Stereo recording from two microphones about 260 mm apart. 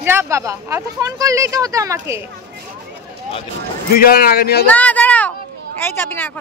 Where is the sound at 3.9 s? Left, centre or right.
Left.